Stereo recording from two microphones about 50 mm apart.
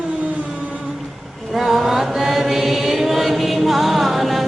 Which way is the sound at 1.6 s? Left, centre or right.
Centre.